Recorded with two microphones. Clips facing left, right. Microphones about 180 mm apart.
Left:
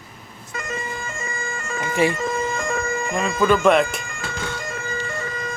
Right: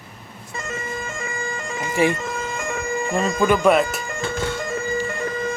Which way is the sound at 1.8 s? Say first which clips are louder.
Even; 15° right (ahead or behind).